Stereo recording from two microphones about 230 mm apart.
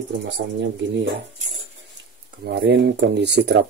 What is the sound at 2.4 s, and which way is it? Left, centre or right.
Speech, right.